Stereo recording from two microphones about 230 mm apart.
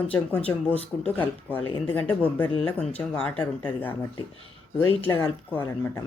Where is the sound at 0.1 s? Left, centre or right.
Centre.